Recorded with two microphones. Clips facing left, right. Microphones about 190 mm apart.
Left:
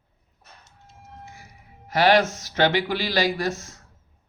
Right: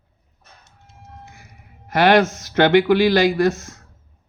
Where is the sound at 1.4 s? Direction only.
55° right (ahead or behind).